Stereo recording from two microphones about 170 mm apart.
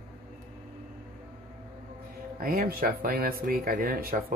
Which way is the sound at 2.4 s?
60° right (ahead or behind).